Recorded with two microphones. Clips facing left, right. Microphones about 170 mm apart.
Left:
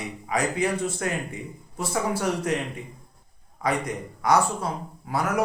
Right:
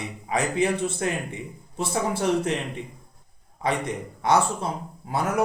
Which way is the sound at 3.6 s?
25° right (ahead or behind).